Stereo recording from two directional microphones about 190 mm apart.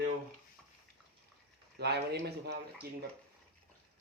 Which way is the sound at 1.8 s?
60° right (ahead or behind).